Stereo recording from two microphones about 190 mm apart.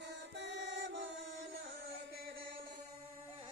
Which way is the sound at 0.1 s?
65° right (ahead or behind).